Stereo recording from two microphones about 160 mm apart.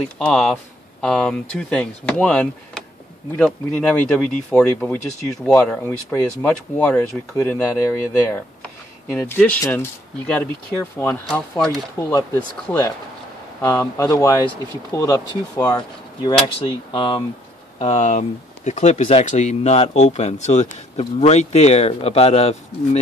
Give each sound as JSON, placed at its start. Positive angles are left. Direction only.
{"t": 0.2, "sound": "speech", "side_deg": 0}
{"t": 12.0, "sound": "speech", "side_deg": 20}
{"t": 17.7, "sound": "speech", "side_deg": 45}